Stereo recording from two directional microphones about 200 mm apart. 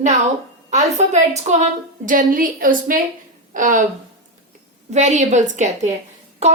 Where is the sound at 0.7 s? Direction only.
35° right (ahead or behind).